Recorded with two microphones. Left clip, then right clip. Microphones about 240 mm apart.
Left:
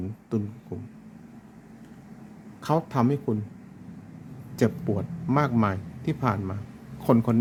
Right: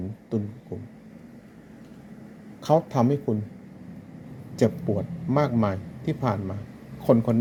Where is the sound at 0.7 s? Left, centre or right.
Left.